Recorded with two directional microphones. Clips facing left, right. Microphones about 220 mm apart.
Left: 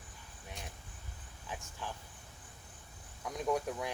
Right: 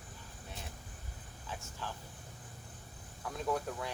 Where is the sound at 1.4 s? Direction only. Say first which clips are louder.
Even; 15° left (ahead or behind).